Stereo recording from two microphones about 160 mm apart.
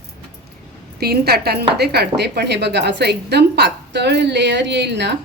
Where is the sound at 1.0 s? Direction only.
75° right (ahead or behind).